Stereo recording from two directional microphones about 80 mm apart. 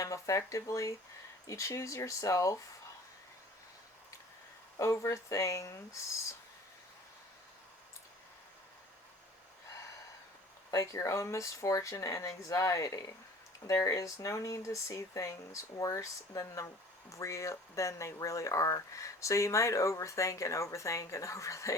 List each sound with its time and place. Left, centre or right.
0.0 s speech: left
4.8 s speech: left
10.7 s speech: left